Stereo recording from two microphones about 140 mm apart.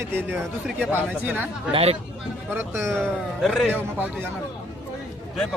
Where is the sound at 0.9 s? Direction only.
15° right (ahead or behind).